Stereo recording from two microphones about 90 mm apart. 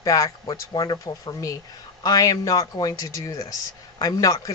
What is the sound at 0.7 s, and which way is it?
Speech, 55° left (ahead or behind).